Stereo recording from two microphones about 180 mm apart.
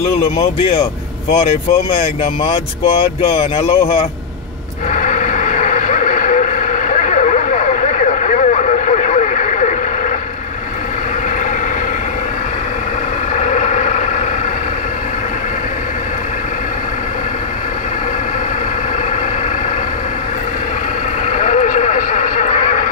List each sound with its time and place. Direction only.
0.4 s speech: 30° left (ahead or behind)
4.9 s vehicle: 45° left (ahead or behind)
13.4 s vehicle: 40° left (ahead or behind)
21.3 s vehicle: 40° left (ahead or behind)